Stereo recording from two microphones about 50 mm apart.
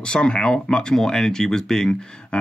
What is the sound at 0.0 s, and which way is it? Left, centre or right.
A man's voice, centre.